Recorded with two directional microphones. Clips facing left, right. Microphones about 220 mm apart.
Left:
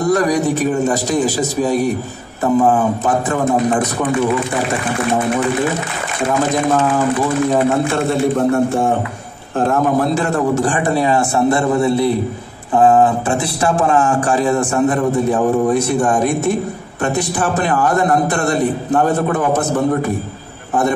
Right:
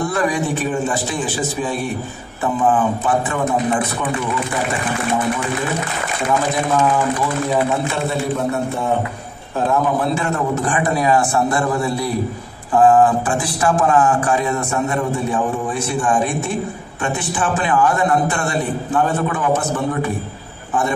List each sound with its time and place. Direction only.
0.0 s a man's voice: 40° left (ahead or behind)
8.4 s a man's voice: 50° left (ahead or behind); by 15.0 s 30° left (ahead or behind)
16.0 s a man's voice: 40° left (ahead or behind)